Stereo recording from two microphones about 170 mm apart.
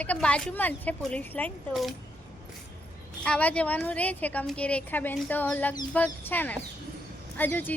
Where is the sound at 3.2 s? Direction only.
5° left (ahead or behind).